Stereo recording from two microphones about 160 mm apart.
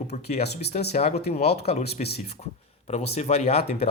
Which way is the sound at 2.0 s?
50° left (ahead or behind).